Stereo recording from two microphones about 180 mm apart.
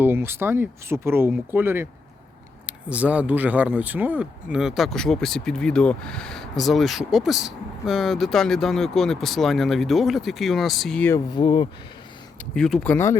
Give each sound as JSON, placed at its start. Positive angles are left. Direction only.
{"t": 0.0, "sound": "speech", "side_deg": -10}
{"t": 11.3, "sound": "speech", "side_deg": 25}
{"t": 12.5, "sound": "speech", "side_deg": 5}